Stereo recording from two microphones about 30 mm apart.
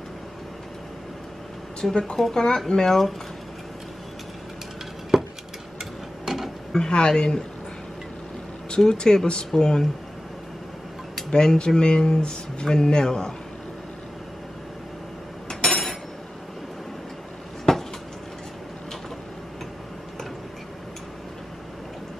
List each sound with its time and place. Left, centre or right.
1.8 s speech: left
5.1 s a sound: centre
6.2 s mechanisms: centre
6.8 s speech: left
8.6 s speech: left
11.2 s speech: left
15.4 s hammer: centre
17.7 s a sound: centre